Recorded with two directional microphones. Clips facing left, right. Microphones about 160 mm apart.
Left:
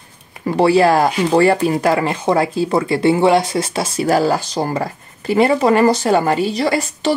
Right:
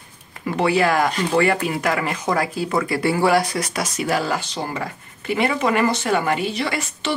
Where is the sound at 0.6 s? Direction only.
35° left (ahead or behind).